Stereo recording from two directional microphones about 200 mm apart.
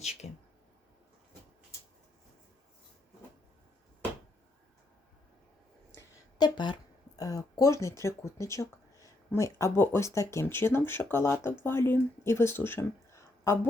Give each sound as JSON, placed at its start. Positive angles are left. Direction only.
{"t": 0.0, "sound": "speech", "side_deg": 35}
{"t": 5.9, "sound": "a sound", "side_deg": 15}
{"t": 7.2, "sound": "speech", "side_deg": 20}